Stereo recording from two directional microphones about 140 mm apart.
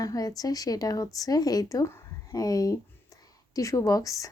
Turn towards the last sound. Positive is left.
turn(degrees=25)  # may be behind; listen again after turning